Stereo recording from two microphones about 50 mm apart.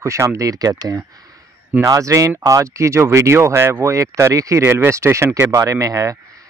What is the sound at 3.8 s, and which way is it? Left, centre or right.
Speech, right.